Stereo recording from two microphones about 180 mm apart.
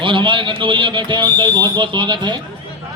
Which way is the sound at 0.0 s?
30° right (ahead or behind).